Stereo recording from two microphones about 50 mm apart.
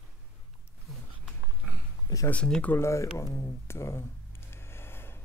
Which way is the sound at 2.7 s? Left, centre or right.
Left.